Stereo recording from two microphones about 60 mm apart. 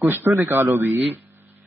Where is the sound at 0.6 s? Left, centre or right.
Right.